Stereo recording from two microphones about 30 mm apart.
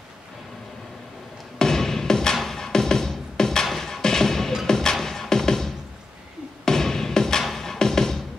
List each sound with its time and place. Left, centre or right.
1.6 s music: centre